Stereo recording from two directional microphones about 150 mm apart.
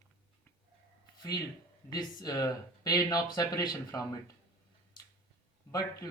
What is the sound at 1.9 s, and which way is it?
Speech, 25° left (ahead or behind).